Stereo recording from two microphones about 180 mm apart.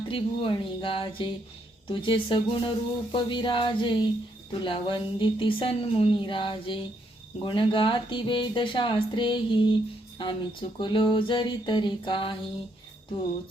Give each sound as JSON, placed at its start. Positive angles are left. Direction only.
{"t": 0.1, "sound": "speech", "side_deg": 30}